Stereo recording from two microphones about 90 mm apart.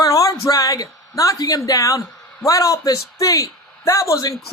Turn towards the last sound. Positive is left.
turn(degrees=40)  # may be behind; listen again after turning